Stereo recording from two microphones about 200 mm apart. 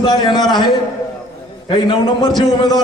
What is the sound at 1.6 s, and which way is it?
Speech, 25° left (ahead or behind).